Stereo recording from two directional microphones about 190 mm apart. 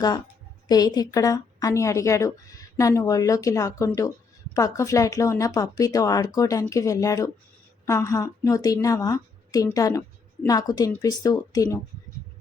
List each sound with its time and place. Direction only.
0.7 s a woman's voice: 20° left (ahead or behind)